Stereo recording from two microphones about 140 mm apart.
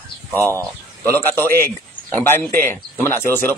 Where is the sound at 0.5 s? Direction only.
20° right (ahead or behind).